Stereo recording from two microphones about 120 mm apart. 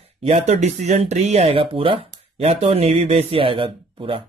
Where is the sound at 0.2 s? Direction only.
65° right (ahead or behind).